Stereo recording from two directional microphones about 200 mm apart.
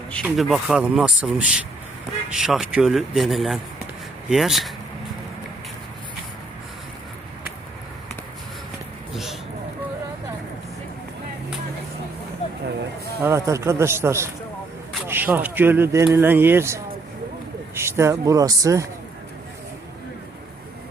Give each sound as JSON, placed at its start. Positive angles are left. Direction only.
{"t": 0.3, "sound": "speech", "side_deg": 0}
{"t": 13.2, "sound": "a man's voice", "side_deg": -15}